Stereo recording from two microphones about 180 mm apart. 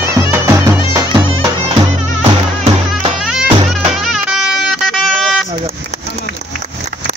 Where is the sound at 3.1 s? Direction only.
5° right (ahead or behind).